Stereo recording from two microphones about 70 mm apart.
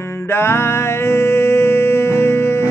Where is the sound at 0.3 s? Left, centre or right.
Left.